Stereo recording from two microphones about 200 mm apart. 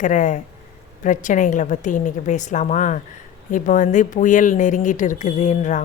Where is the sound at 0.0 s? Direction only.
40° left (ahead or behind).